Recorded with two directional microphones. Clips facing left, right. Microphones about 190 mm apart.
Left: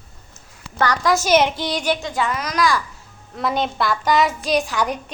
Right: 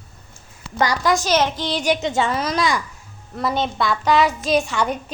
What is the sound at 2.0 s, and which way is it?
Speech, 25° right (ahead or behind).